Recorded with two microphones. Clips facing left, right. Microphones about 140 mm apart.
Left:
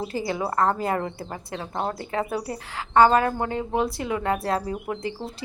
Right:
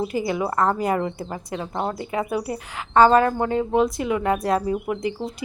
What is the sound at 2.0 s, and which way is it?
A woman's voice, 15° right (ahead or behind).